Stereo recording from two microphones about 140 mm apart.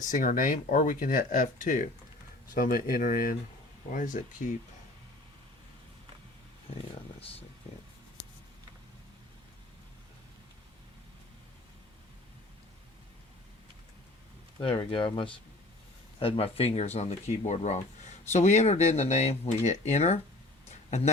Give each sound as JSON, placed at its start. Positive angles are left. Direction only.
{"t": 0.0, "sound": "speech", "side_deg": 65}
{"t": 2.6, "sound": "speech", "side_deg": 90}
{"t": 3.9, "sound": "speech", "side_deg": 70}
{"t": 14.6, "sound": "speech", "side_deg": 40}
{"t": 20.7, "sound": "a sound", "side_deg": 50}